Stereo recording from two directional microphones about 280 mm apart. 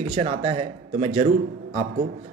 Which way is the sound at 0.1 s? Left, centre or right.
Centre.